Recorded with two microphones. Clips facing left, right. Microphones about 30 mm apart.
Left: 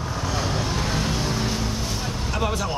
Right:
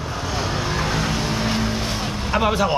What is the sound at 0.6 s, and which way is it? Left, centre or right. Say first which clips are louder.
Vehicle: right 3 dB; right.